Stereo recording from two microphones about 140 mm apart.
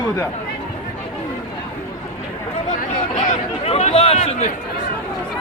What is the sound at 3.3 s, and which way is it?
Speech, 50° left (ahead or behind).